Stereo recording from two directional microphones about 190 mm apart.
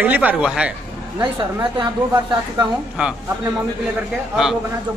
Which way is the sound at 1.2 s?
25° right (ahead or behind).